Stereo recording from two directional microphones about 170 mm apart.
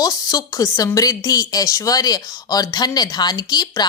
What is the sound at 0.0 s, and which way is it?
Speech, 20° left (ahead or behind).